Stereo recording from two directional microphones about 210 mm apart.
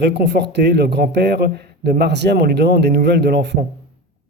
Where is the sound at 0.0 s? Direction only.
50° right (ahead or behind).